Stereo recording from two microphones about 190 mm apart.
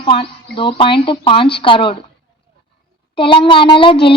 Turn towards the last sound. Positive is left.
turn(degrees=25)  # may be behind; listen again after turning